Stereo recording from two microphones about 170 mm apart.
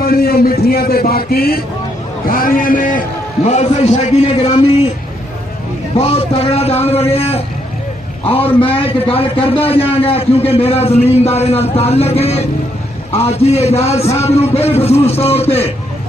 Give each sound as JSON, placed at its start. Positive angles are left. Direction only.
{"t": 0.0, "sound": "a man's voice", "side_deg": 65}
{"t": 3.4, "sound": "a man's voice", "side_deg": 40}
{"t": 5.9, "sound": "a man's voice", "side_deg": 35}